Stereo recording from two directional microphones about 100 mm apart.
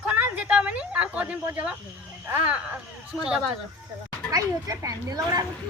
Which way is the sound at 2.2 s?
15° right (ahead or behind).